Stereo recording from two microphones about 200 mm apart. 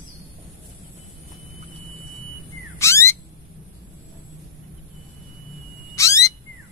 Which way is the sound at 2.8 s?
15° left (ahead or behind).